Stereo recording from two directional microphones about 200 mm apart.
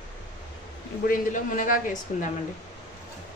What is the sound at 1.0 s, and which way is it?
Speech, 45° left (ahead or behind).